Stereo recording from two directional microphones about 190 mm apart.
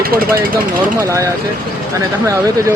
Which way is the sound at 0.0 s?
50° right (ahead or behind).